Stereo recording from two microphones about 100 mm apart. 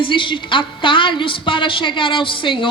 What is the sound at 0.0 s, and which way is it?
A woman's voice, 55° left (ahead or behind).